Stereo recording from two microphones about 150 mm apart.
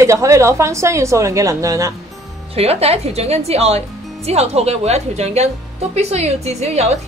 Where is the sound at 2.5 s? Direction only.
45° right (ahead or behind).